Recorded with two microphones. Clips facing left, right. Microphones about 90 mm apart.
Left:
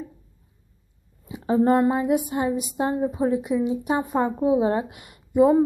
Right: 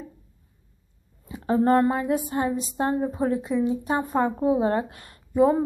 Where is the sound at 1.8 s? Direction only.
15° left (ahead or behind).